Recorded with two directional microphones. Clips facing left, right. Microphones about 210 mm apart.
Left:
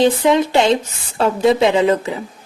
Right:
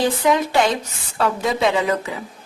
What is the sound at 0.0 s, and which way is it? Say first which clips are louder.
Speech: left 5 dB; 25° left (ahead or behind).